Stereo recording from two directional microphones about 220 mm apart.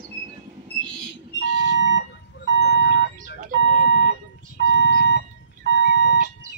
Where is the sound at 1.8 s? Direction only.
55° left (ahead or behind).